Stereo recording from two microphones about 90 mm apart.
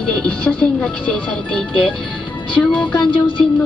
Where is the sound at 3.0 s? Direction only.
65° left (ahead or behind).